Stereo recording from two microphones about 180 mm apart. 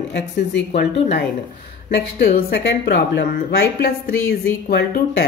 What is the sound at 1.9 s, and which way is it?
Speech, 70° left (ahead or behind).